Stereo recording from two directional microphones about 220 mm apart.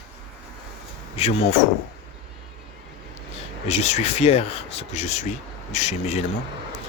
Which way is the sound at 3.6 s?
30° left (ahead or behind).